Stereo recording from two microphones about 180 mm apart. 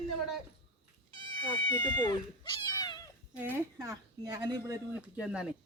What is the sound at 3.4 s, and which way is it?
Speech, 10° right (ahead or behind).